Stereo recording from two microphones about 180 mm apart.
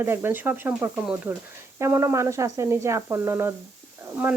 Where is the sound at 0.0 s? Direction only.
10° right (ahead or behind).